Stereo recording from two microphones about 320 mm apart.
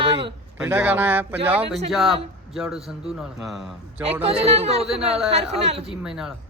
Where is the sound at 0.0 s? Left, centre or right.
Centre.